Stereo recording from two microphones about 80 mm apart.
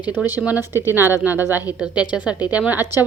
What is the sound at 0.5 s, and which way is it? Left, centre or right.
Speech, right.